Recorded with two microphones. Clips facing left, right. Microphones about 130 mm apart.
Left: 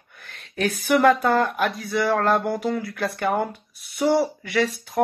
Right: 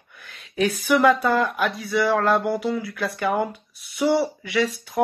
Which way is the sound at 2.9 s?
Centre (ahead or behind).